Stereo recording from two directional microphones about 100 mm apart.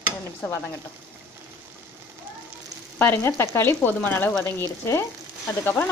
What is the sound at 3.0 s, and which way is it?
Frying, 25° left (ahead or behind).